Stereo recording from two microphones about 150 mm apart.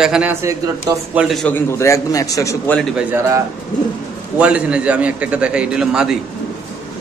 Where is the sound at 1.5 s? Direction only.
20° left (ahead or behind).